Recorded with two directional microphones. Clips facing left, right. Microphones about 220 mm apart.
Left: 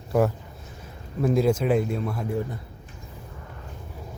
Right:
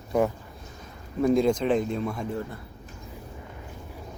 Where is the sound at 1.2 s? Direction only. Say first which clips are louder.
Even; 5° left (ahead or behind).